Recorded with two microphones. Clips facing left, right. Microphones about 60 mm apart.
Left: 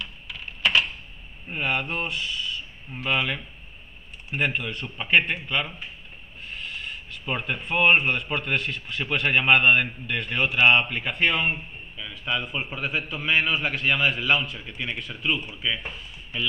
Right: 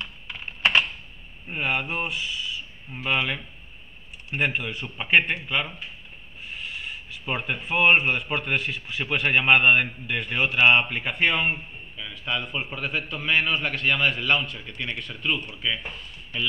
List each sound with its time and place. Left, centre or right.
0.0 s computer keyboard: right
1.5 s speech: centre